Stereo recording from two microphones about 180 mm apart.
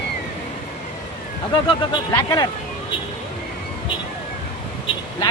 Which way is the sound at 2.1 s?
20° left (ahead or behind).